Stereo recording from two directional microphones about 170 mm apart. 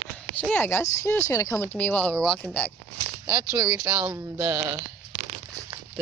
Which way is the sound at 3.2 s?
10° right (ahead or behind).